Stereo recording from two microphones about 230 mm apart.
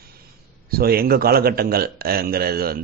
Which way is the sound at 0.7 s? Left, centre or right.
Right.